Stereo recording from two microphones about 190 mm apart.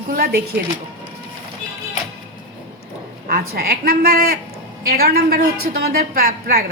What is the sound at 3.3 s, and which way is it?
A woman's voice, 50° right (ahead or behind).